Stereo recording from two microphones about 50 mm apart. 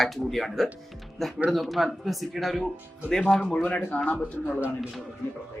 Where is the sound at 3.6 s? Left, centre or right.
Left.